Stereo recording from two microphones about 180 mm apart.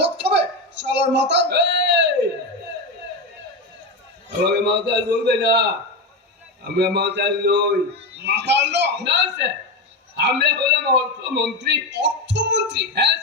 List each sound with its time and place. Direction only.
0.0 s a sound: 70° right (ahead or behind)
4.5 s a man's voice: 70° right (ahead or behind)
6.7 s a man's voice: 70° right (ahead or behind)